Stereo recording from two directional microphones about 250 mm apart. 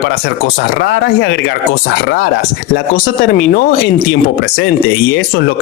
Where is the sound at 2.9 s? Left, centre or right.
Left.